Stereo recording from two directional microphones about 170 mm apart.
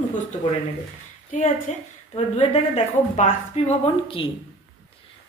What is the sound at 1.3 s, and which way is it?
Speech, 50° left (ahead or behind).